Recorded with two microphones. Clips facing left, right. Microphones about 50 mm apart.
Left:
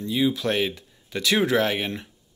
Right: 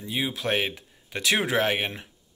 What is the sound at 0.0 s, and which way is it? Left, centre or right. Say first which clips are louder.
Speech: left 6 dB; centre.